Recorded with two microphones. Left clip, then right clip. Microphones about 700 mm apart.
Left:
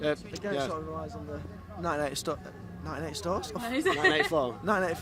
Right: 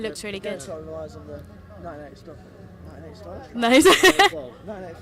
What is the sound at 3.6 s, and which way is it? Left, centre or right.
Speech, right.